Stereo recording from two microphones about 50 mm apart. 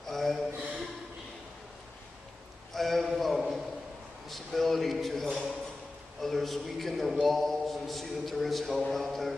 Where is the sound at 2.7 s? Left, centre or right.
Centre.